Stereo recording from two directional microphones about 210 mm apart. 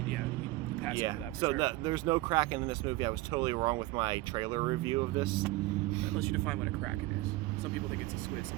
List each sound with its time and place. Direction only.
1.0 s speech: 20° right (ahead or behind)
6.1 s speech: 5° left (ahead or behind)